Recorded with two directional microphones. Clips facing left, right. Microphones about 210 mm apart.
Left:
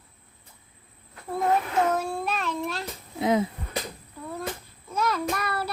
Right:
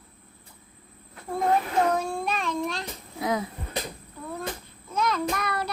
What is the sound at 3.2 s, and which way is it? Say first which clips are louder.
Wheeze: left 4 dB; 25° left (ahead or behind).